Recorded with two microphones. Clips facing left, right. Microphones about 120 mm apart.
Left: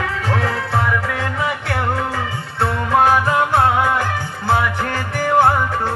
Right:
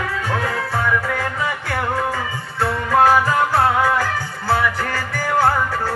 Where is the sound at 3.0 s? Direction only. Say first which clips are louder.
Right 1 dB; 25° left (ahead or behind).